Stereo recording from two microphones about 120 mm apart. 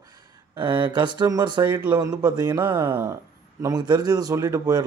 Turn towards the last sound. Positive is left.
turn(degrees=-30)  # may be behind; listen again after turning